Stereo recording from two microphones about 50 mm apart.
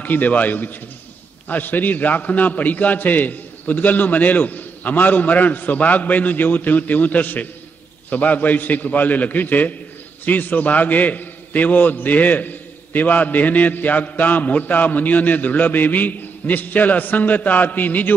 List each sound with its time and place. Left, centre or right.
0.0 s a man's voice: left